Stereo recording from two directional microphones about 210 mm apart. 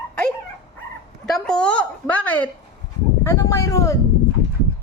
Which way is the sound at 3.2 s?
15° left (ahead or behind).